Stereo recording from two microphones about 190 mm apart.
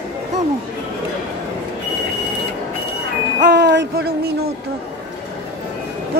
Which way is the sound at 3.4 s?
65° right (ahead or behind).